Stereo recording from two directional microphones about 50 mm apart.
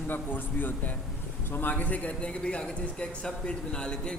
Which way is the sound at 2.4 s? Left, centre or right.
Centre.